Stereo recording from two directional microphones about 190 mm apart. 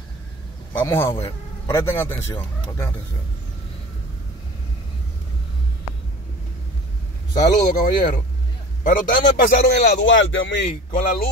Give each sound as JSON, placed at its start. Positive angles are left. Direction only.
{"t": 0.8, "sound": "speech", "side_deg": 15}
{"t": 7.6, "sound": "a man's voice", "side_deg": 45}
{"t": 9.9, "sound": "speech", "side_deg": 80}
{"t": 10.9, "sound": "a man's voice", "side_deg": 50}